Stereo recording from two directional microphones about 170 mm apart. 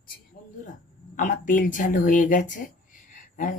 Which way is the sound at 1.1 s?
50° left (ahead or behind).